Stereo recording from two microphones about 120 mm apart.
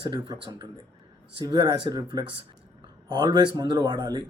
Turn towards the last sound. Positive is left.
turn(degrees=-35)  # may be behind; listen again after turning